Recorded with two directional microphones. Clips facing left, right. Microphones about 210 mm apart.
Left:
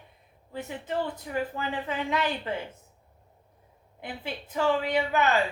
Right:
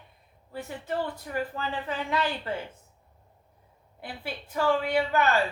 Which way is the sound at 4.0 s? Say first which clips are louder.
Left 1 dB; 20° left (ahead or behind).